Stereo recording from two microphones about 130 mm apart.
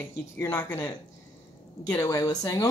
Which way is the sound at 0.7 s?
10° left (ahead or behind).